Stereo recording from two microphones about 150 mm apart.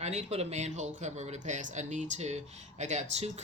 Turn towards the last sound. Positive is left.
turn(degrees=-45)  # may be behind; listen again after turning